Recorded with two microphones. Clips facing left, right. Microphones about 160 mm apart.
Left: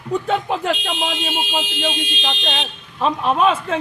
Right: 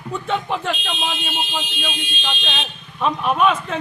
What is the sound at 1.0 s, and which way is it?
Speech, 90° left.